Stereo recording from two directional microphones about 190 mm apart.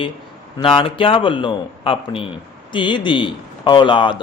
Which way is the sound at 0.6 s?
30° left (ahead or behind).